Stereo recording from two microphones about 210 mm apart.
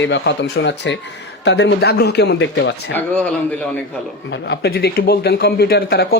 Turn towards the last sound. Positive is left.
turn(degrees=50)  # may be behind; listen again after turning